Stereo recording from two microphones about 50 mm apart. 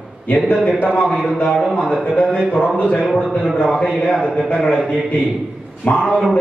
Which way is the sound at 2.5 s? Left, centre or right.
Left.